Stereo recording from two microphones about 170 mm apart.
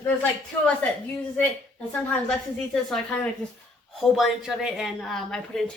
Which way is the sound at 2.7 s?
5° left (ahead or behind).